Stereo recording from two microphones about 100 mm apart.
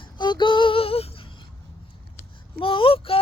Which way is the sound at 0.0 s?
50° left (ahead or behind).